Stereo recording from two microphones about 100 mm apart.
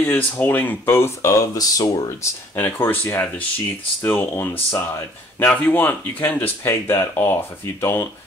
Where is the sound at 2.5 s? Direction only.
20° left (ahead or behind).